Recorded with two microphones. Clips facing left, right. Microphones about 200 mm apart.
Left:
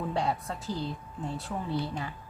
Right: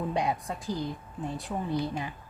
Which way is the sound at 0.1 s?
15° right (ahead or behind).